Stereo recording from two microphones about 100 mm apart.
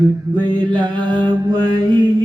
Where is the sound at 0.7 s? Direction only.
50° right (ahead or behind).